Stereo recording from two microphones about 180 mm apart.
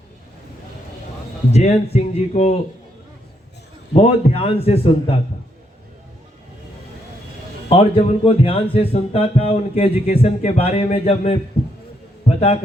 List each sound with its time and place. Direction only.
1.5 s speech: 35° left (ahead or behind)
3.9 s speech: 35° left (ahead or behind)
7.7 s a man's voice: 30° left (ahead or behind)